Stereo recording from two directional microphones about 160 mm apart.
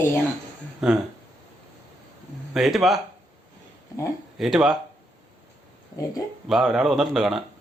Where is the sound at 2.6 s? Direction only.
Centre (ahead or behind).